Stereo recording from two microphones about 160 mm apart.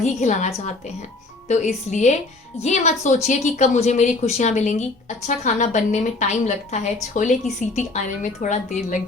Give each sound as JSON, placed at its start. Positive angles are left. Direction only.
{"t": 0.0, "sound": "speech", "side_deg": 50}